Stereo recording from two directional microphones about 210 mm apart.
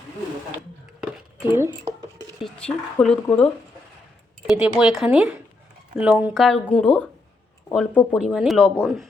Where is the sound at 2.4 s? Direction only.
5° left (ahead or behind).